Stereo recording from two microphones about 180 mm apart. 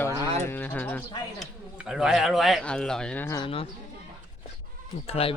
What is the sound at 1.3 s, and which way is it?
Speech, 5° right (ahead or behind).